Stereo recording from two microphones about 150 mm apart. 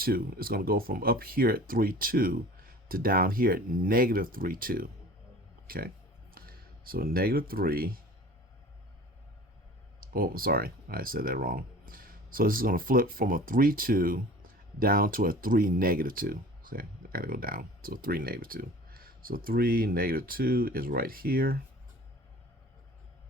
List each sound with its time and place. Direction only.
0.0 s speech: 80° right
10.0 s speech: 75° right (ahead or behind)